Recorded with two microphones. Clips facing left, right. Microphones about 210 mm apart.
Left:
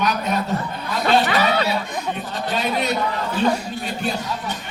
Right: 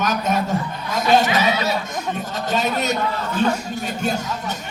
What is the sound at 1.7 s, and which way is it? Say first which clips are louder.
A man's voice: even; 40° right (ahead or behind).